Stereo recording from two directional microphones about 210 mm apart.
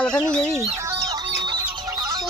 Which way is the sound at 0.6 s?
15° right (ahead or behind).